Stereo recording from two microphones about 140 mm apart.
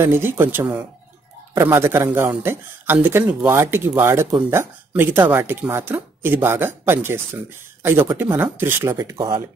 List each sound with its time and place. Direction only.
0.0 s a man's voice: 15° right (ahead or behind)